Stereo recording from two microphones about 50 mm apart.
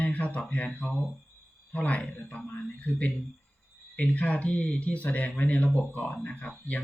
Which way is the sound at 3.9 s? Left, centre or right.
Left.